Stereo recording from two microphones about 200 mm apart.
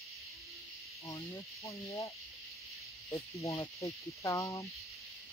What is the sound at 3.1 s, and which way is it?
Speech, 15° left (ahead or behind).